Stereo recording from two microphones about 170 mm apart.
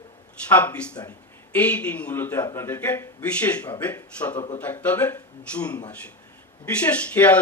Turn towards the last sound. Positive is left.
turn(degrees=10)  # may be behind; listen again after turning